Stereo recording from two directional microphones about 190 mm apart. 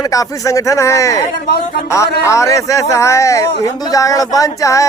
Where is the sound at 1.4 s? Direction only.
55° left (ahead or behind).